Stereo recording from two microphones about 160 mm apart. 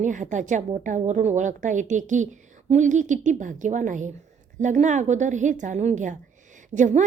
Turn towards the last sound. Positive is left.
turn(degrees=-50)  # may be behind; listen again after turning